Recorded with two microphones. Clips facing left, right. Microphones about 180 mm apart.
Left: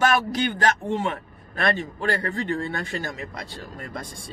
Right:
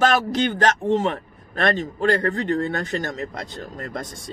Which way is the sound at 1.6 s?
45° right (ahead or behind).